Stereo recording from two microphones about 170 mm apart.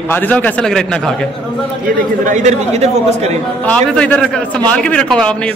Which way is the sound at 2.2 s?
45° right (ahead or behind).